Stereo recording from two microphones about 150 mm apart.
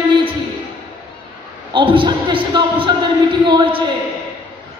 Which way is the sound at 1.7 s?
30° right (ahead or behind).